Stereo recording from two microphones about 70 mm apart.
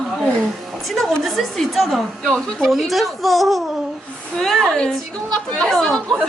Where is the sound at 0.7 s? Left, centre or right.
Centre.